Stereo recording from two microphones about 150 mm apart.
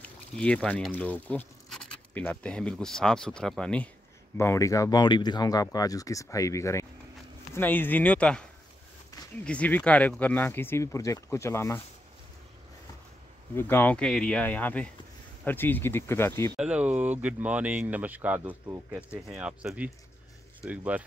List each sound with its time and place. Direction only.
0.0 s speech: 5° left (ahead or behind)
4.4 s speech: 20° left (ahead or behind)
13.6 s speech: 15° left (ahead or behind)
16.5 s speech: 10° right (ahead or behind)